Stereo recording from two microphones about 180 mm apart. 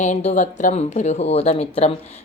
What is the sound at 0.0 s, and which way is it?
Speech, 40° left (ahead or behind).